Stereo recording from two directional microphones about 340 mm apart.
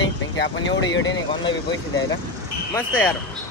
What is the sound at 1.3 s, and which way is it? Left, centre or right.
Speech, centre.